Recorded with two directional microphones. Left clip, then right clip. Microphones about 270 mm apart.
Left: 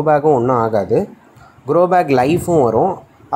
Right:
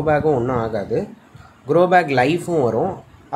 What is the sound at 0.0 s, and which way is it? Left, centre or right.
Speech, centre.